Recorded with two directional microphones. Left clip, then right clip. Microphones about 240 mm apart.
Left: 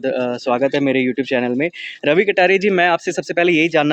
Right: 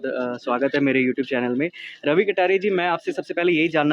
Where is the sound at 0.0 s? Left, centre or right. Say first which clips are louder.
Left 6 dB; left.